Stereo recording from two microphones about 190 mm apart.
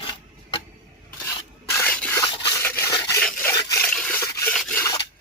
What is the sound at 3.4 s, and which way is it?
Water, 15° left (ahead or behind).